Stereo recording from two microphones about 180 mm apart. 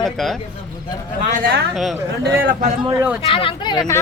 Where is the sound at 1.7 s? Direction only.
Centre (ahead or behind).